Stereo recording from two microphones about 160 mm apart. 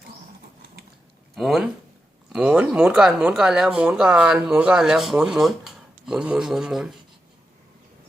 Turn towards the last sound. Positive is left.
turn(degrees=-5)  # may be behind; listen again after turning